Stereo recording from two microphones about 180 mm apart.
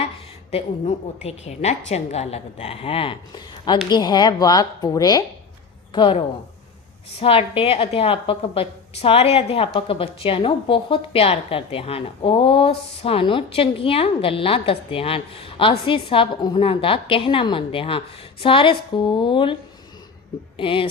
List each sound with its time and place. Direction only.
0.5 s a woman's voice: 35° left (ahead or behind)
20.6 s a woman's voice: 30° left (ahead or behind)